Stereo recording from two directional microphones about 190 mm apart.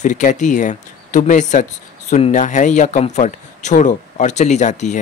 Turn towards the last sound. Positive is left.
turn(degrees=40)  # may be behind; listen again after turning